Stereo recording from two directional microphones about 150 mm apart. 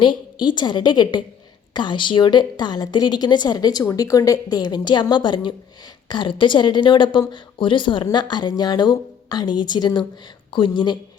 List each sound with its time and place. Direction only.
0.0 s a woman's voice: 30° left (ahead or behind)